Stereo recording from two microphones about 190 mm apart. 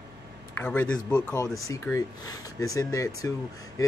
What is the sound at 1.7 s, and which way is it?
Speech, 15° left (ahead or behind).